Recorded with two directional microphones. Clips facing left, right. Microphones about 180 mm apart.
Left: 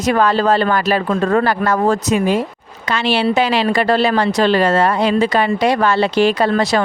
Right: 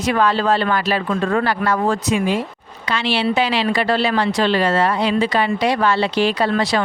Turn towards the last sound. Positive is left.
turn(degrees=45)  # may be behind; listen again after turning